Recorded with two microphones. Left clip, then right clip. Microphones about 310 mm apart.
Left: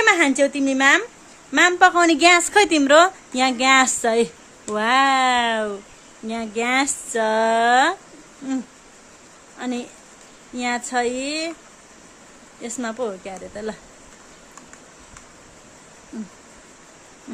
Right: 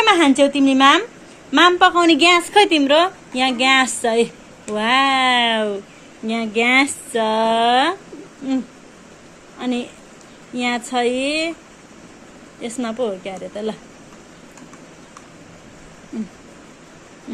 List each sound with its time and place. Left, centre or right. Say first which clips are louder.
0.0 s a sound: right 2 dB; centre
0.3 s a woman's voice: right 4 dB; centre
9.6 s a woman's voice: right 4 dB; centre
12.6 s a woman's voice: right 4 dB; centre